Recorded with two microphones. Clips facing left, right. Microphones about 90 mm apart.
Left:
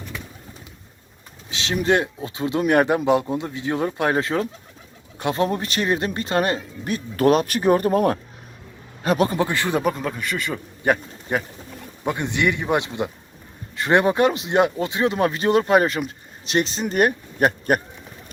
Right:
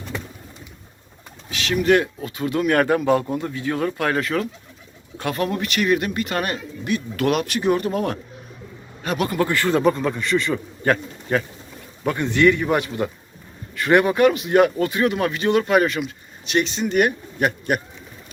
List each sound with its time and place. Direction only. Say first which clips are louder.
1.5 s speech: right 2 dB; 25° left (ahead or behind)
9.8 s a man's voice: right 4 dB; centre (ahead or behind); by 17.7 s 40° left (ahead or behind)